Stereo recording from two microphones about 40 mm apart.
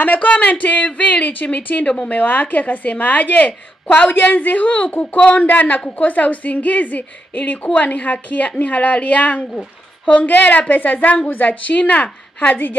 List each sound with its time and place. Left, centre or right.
0.0 s a woman's voice: left
4.1 s a woman's voice: left
5.5 s a woman's voice: left
12.4 s a woman's voice: left